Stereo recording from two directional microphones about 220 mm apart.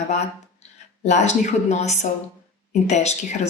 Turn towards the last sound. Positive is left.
turn(degrees=30)  # may be behind; listen again after turning